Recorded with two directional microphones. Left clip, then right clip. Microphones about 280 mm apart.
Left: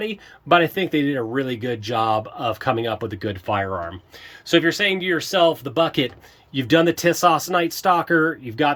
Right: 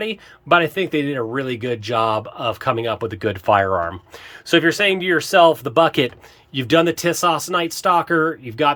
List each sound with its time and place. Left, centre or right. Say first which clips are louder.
0.0 s speech: right 2 dB; centre